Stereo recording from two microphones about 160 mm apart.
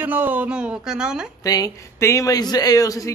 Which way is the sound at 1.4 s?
20° left (ahead or behind).